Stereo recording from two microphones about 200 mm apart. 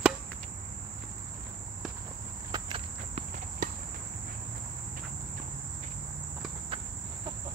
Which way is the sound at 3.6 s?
40° right (ahead or behind).